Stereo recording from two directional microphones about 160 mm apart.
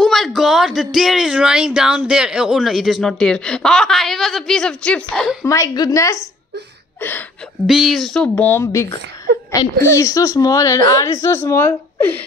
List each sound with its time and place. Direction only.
0.0 s speech: centre (ahead or behind)
5.4 s speech: 20° left (ahead or behind)
7.0 s a sound: 15° left (ahead or behind)
7.6 s speech: centre (ahead or behind)